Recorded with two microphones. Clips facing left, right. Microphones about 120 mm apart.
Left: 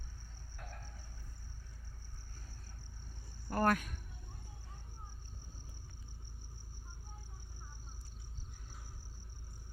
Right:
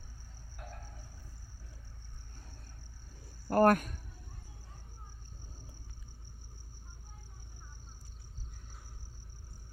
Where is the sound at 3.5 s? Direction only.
50° right (ahead or behind).